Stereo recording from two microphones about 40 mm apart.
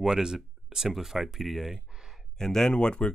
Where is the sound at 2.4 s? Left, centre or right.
Centre.